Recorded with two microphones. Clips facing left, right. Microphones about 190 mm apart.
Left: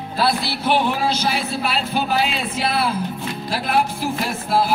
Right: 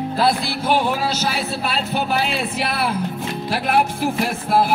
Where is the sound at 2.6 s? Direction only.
60° right (ahead or behind).